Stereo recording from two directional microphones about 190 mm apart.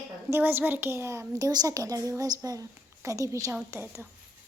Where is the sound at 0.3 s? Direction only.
10° right (ahead or behind).